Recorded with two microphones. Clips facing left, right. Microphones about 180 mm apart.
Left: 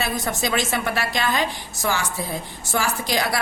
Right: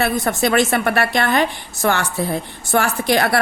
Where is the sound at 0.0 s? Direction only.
60° right (ahead or behind).